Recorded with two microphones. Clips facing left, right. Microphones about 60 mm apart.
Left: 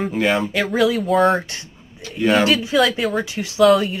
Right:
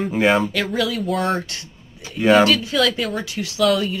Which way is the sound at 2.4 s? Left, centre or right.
Centre.